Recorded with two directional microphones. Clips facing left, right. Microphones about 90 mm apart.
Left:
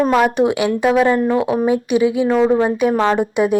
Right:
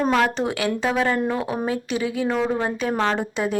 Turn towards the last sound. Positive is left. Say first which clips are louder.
# left 8 dB
turn(degrees=15)  # may be behind; listen again after turning